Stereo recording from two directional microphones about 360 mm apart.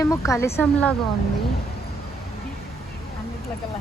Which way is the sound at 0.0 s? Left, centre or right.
Centre.